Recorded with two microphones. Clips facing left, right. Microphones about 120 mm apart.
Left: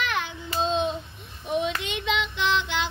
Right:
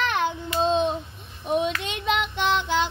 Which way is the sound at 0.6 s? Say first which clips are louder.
Right 4 dB; 45° right (ahead or behind).